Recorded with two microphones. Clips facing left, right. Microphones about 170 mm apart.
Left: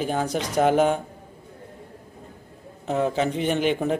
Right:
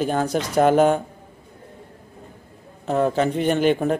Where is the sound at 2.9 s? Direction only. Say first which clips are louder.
Right 3 dB; 55° right (ahead or behind).